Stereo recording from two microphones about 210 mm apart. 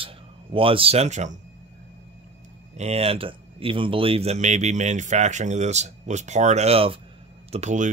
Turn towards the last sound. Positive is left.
turn(degrees=-35)  # may be behind; listen again after turning